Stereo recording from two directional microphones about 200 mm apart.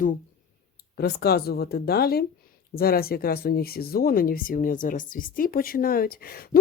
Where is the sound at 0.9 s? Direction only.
50° left (ahead or behind).